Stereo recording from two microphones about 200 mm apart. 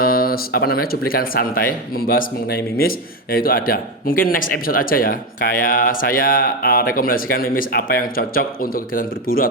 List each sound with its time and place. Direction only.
0.0 s speech: 50° left (ahead or behind)